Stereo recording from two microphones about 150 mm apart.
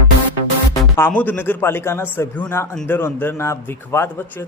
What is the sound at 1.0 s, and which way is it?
A man's voice, 10° left (ahead or behind).